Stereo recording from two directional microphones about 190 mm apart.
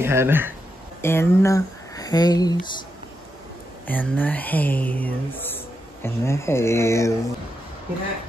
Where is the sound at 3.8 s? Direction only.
10° left (ahead or behind).